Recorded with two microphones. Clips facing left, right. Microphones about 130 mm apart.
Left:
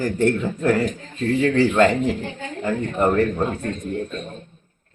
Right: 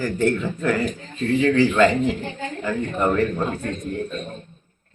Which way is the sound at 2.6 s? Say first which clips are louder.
Left 2 dB; 25° left (ahead or behind).